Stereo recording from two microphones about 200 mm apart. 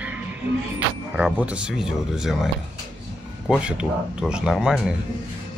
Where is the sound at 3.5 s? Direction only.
5° right (ahead or behind).